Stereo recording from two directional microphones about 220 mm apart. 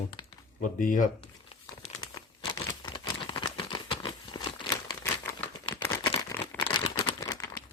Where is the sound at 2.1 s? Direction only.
15° left (ahead or behind).